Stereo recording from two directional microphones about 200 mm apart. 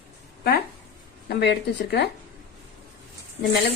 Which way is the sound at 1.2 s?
55° left (ahead or behind).